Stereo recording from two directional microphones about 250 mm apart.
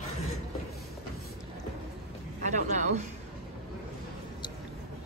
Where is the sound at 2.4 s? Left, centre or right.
Right.